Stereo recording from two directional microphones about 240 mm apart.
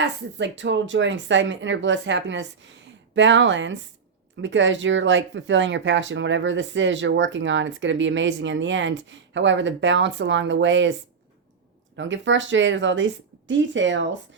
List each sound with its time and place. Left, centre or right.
0.0 s speech: right
11.9 s speech: right